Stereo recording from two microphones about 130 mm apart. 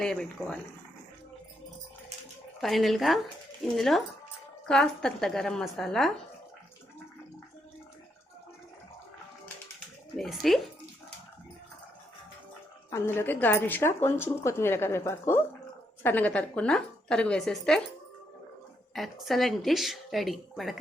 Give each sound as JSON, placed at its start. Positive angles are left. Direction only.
{"t": 0.0, "sound": "a woman's voice", "side_deg": 5}
{"t": 2.6, "sound": "a woman's voice", "side_deg": 0}
{"t": 10.2, "sound": "a woman's voice", "side_deg": 0}
{"t": 12.9, "sound": "a woman's voice", "side_deg": 20}
{"t": 19.2, "sound": "a woman's voice", "side_deg": 0}